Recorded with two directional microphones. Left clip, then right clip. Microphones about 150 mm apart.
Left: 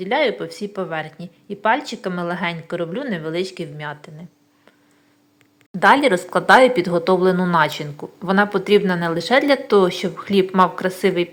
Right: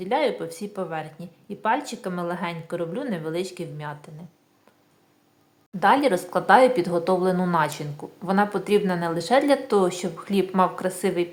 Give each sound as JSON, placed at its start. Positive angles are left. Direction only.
{"t": 0.0, "sound": "speech", "side_deg": 10}
{"t": 5.8, "sound": "speech", "side_deg": 20}